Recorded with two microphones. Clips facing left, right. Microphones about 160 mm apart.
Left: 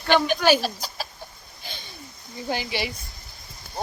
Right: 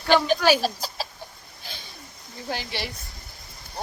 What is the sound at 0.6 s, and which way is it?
Speech, 35° right (ahead or behind).